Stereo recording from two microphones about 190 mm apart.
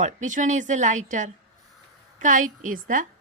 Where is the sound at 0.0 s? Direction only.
40° right (ahead or behind).